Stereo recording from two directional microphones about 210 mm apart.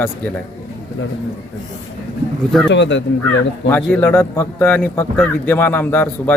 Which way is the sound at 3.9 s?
5° left (ahead or behind).